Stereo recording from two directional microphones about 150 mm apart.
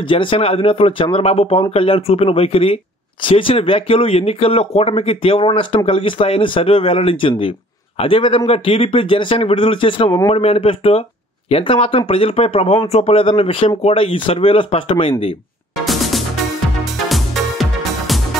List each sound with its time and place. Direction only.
0.1 s speech: 35° left (ahead or behind)
17.1 s music: centre (ahead or behind)